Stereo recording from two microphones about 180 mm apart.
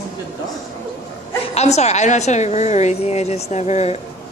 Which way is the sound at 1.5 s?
40° left (ahead or behind).